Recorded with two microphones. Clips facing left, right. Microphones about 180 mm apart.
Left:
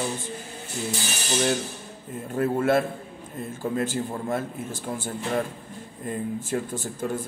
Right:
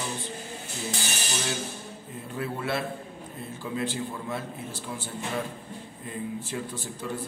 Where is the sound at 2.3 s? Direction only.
45° left (ahead or behind).